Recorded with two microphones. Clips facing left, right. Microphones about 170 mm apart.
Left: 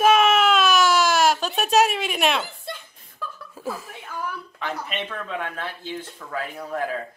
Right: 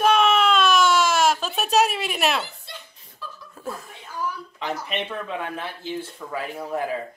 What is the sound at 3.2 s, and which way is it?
Laughter, 50° left (ahead or behind).